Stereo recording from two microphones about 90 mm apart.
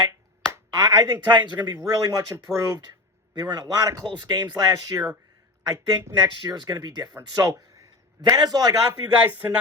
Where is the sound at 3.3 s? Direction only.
50° right (ahead or behind).